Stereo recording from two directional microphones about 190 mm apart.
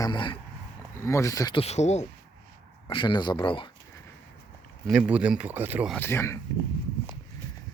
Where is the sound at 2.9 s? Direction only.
25° left (ahead or behind).